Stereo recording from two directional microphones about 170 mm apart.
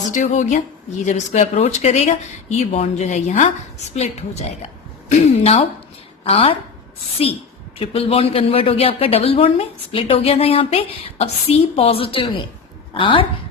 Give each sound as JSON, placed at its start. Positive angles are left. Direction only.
{"t": 0.1, "sound": "speech", "side_deg": 50}
{"t": 7.8, "sound": "speech", "side_deg": 35}